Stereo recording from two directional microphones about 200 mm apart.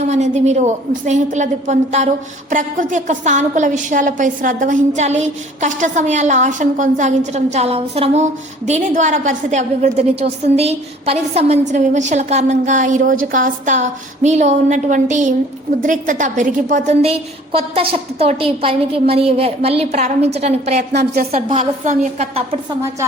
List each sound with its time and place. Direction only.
0.0 s a woman's voice: 35° right (ahead or behind)
20.9 s a woman's voice: 50° right (ahead or behind)
21.6 s a woman's voice: 35° right (ahead or behind)